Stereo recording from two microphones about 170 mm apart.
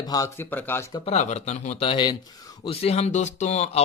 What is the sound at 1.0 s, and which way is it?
Speech, 40° left (ahead or behind).